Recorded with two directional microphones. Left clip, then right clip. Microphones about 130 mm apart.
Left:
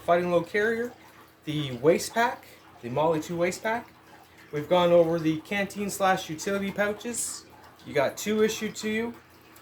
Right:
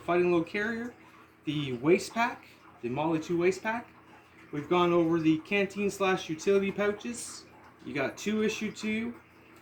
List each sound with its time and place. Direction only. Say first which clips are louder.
0.0 s speech: left 3 dB; 50° left (ahead or behind)